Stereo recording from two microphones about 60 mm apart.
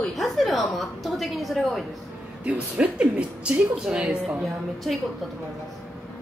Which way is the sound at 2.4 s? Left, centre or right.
Centre.